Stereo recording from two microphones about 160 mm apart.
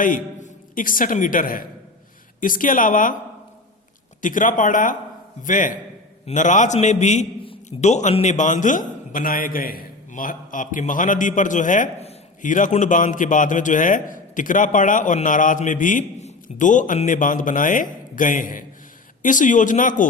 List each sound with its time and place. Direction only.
0.0 s a man's voice: 55° left (ahead or behind)
4.2 s a man's voice: 55° left (ahead or behind)